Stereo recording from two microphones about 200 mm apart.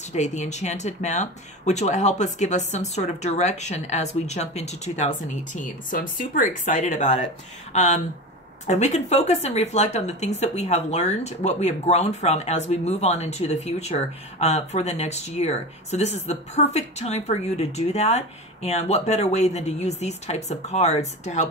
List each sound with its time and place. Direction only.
0.1 s a woman's voice: 35° left (ahead or behind)